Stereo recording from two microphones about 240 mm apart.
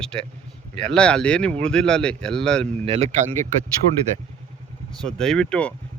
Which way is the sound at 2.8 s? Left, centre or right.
Right.